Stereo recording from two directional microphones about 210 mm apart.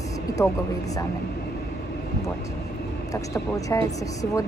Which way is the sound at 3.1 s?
15° left (ahead or behind).